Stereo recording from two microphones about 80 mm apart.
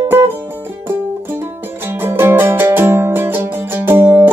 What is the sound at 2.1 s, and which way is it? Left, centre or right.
Music, right.